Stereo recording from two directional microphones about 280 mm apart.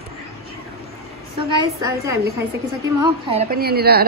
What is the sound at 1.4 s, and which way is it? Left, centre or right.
A woman's voice, centre.